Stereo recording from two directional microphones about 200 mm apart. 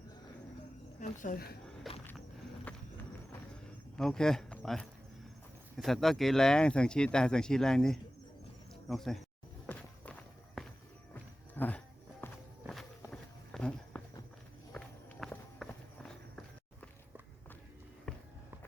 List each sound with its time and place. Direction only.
0.9 s a woman's voice: 40° left (ahead or behind)
1.9 s music: centre (ahead or behind)
2.7 s horse: 5° left (ahead or behind)
3.9 s speech: 5° left (ahead or behind)
9.6 s walk: 5° left (ahead or behind)